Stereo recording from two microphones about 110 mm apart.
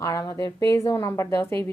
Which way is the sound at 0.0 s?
30° left (ahead or behind).